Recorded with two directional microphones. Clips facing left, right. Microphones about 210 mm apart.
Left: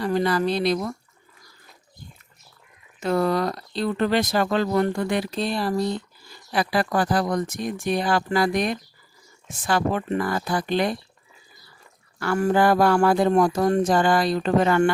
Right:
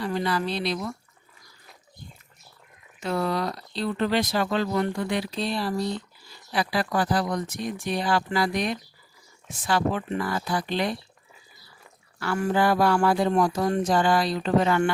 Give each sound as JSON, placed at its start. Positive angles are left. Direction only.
{"t": 0.0, "sound": "speech", "side_deg": 45}
{"t": 3.0, "sound": "speech", "side_deg": 45}
{"t": 12.2, "sound": "speech", "side_deg": 45}